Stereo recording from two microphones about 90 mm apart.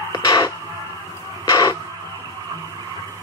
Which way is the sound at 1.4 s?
50° left (ahead or behind).